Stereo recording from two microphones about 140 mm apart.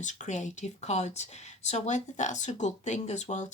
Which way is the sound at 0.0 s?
60° left (ahead or behind).